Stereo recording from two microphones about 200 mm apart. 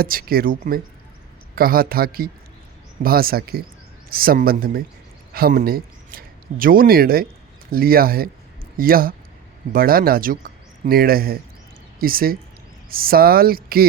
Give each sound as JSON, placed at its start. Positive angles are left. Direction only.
{"t": 0.0, "sound": "speech", "side_deg": -45}